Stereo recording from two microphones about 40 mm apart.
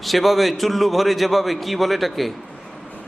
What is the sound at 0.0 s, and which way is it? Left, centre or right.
A man's voice, centre.